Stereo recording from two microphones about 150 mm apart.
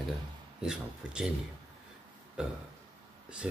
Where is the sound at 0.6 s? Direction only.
5° right (ahead or behind).